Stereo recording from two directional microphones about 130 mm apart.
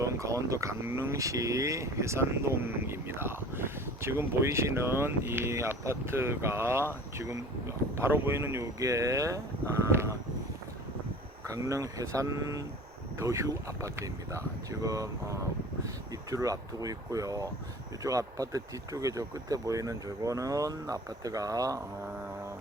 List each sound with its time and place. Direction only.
0.0 s speech: 25° right (ahead or behind)
11.4 s speech: 25° right (ahead or behind)